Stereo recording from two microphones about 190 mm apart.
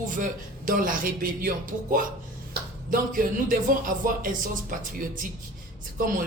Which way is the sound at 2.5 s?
45° right (ahead or behind).